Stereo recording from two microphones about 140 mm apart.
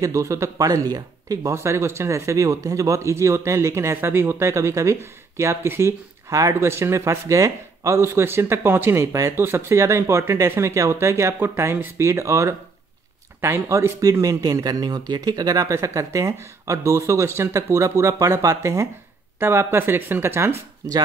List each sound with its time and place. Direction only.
0.0 s speech: 20° right (ahead or behind)